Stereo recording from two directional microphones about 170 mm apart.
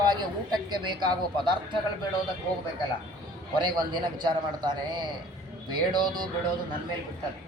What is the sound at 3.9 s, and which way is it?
A woman's voice, 25° right (ahead or behind).